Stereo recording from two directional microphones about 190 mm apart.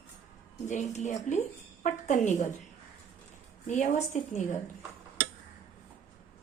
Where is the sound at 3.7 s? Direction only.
40° left (ahead or behind).